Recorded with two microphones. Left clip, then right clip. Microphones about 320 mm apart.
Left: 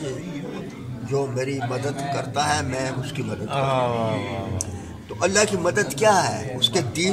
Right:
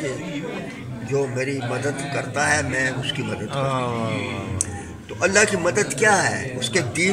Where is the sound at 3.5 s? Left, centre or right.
Left.